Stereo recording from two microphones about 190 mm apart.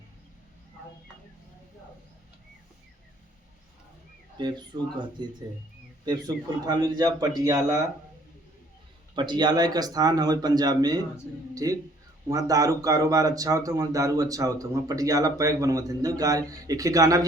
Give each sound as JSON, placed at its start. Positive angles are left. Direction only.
{"t": 4.4, "sound": "speech", "side_deg": -25}
{"t": 9.1, "sound": "speech", "side_deg": -25}